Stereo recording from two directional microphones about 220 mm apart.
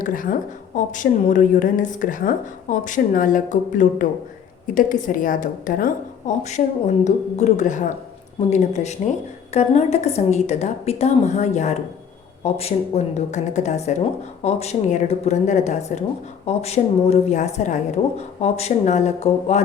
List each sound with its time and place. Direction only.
0.0 s a woman's voice: 40° left (ahead or behind)